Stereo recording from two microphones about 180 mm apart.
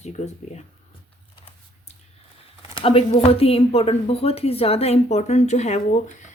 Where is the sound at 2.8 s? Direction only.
30° left (ahead or behind).